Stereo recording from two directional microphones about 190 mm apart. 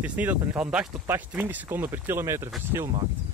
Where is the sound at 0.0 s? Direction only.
10° right (ahead or behind).